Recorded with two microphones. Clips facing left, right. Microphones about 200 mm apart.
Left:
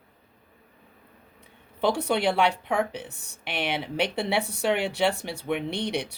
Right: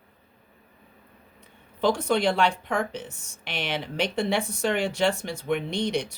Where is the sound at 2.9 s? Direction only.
60° left (ahead or behind).